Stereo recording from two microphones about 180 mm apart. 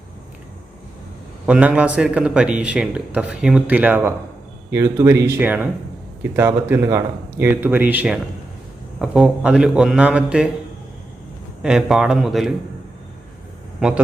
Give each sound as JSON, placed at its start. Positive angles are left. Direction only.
{"t": 1.5, "sound": "a man's voice", "side_deg": -5}
{"t": 11.6, "sound": "a man's voice", "side_deg": -5}
{"t": 13.7, "sound": "a man's voice", "side_deg": -5}